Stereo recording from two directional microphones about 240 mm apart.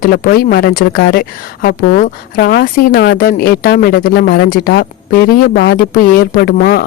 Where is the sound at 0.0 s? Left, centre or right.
Left.